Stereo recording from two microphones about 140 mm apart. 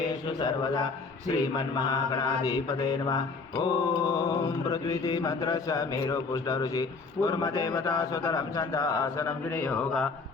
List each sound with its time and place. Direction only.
0.0 s mantra: 30° left (ahead or behind); by 10.1 s 5° left (ahead or behind)